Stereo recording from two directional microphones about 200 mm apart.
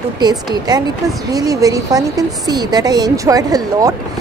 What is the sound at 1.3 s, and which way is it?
A woman's voice, 20° right (ahead or behind).